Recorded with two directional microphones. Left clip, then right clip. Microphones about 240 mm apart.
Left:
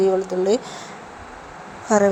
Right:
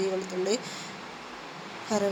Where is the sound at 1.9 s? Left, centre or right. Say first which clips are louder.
Left 12 dB; left.